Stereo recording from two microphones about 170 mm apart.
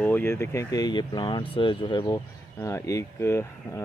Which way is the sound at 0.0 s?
10° left (ahead or behind).